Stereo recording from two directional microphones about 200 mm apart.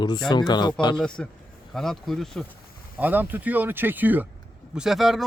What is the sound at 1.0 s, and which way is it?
Speech, 5° left (ahead or behind).